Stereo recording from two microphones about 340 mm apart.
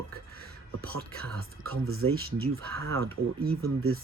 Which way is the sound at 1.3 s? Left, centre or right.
Right.